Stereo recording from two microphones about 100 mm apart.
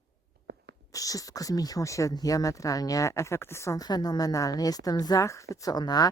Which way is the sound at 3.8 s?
45° left (ahead or behind).